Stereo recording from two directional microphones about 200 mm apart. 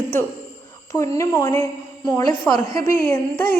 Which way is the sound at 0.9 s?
15° left (ahead or behind).